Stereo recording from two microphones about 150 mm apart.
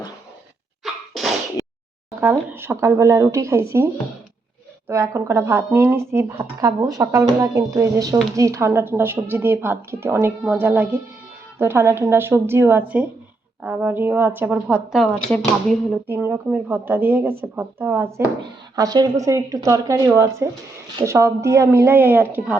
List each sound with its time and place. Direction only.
2.0 s a woman's voice: 20° right (ahead or behind)
4.9 s a woman's voice: 15° right (ahead or behind)
14.9 s speech: 5° left (ahead or behind)
15.9 s a woman's voice: 10° right (ahead or behind)